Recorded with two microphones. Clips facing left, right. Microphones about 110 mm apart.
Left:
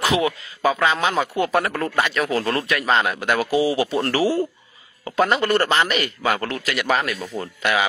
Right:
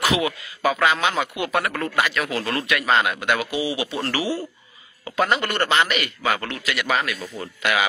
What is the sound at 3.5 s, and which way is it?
Speech, 40° left (ahead or behind).